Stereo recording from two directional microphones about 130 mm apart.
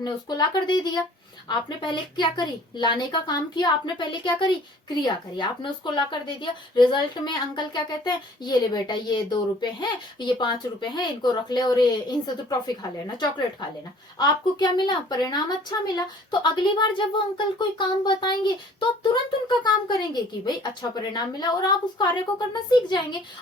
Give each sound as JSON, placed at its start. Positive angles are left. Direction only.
{"t": 0.0, "sound": "a woman's voice", "side_deg": 35}